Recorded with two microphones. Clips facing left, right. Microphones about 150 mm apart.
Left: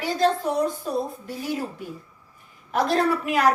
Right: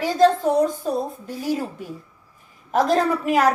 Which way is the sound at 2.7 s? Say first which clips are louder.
Right 3 dB; 40° right (ahead or behind).